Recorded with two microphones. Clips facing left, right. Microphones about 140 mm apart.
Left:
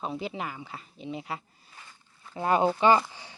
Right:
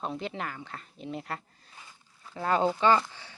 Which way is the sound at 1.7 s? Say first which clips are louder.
Even; 10° right (ahead or behind).